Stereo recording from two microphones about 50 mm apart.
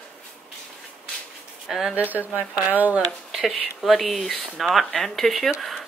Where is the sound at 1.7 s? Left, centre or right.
Centre.